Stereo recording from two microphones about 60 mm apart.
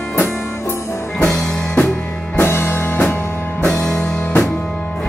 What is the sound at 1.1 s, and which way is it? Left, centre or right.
Music, centre.